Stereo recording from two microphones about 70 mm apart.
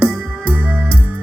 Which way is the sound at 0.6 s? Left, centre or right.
Right.